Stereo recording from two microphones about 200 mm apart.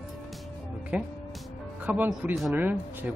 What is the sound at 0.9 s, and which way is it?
Speech, 5° right (ahead or behind).